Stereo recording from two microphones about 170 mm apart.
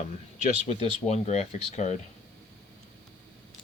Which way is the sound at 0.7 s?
40° left (ahead or behind).